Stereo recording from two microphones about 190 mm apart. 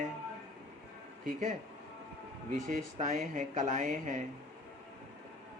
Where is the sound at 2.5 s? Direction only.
40° right (ahead or behind).